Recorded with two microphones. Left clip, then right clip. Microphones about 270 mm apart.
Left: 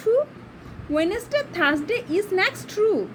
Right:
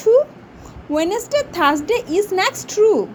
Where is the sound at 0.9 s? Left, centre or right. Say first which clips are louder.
Right 4 dB; centre.